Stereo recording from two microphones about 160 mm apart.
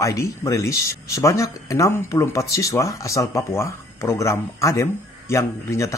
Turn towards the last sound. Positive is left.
turn(degrees=20)  # may be behind; listen again after turning